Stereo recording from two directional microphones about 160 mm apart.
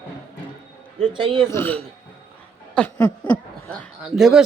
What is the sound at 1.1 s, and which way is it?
Speech, 30° right (ahead or behind).